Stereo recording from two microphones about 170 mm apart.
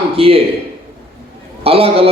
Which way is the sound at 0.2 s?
35° right (ahead or behind).